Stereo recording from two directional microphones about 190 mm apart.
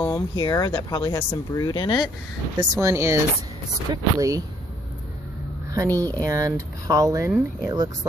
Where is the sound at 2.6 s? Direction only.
15° right (ahead or behind).